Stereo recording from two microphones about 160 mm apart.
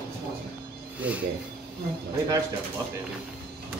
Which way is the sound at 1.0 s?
10° right (ahead or behind).